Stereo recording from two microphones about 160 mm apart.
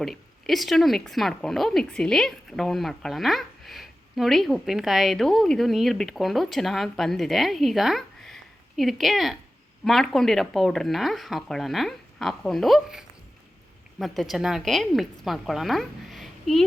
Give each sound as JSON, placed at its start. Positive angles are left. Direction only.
{"t": 0.0, "sound": "speech", "side_deg": 0}